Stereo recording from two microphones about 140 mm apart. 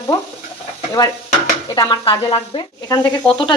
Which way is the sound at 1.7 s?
30° left (ahead or behind).